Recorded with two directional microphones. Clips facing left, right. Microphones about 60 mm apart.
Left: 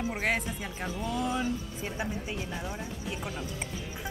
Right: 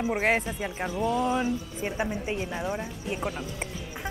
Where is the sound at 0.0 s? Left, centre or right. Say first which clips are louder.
Right 5 dB; right.